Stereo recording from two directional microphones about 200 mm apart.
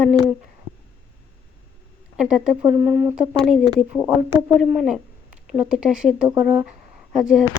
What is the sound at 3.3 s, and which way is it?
Speech, centre (ahead or behind).